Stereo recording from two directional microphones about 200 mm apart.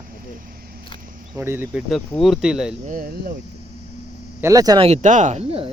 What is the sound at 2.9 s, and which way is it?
Speech, 45° right (ahead or behind).